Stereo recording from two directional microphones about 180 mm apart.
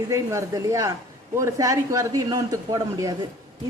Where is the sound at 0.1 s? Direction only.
15° right (ahead or behind).